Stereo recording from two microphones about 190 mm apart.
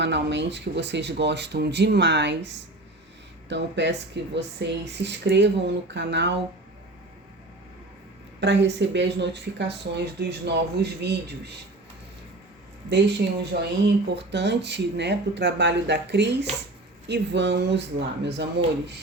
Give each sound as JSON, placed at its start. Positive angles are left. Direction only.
{"t": 0.0, "sound": "speech", "side_deg": -65}
{"t": 8.4, "sound": "speech", "side_deg": -65}
{"t": 12.9, "sound": "speech", "side_deg": -65}